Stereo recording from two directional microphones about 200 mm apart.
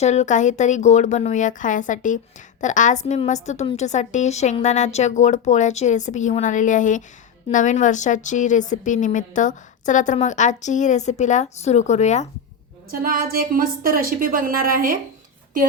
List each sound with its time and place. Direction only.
0.0 s a woman's voice: 35° left (ahead or behind)
12.9 s a woman's voice: 45° right (ahead or behind)